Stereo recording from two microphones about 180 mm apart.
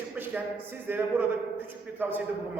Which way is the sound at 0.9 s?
10° right (ahead or behind).